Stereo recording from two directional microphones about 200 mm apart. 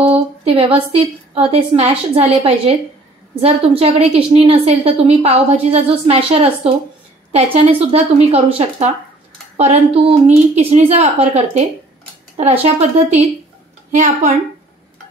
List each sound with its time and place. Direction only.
0.5 s a woman's voice: 30° right (ahead or behind)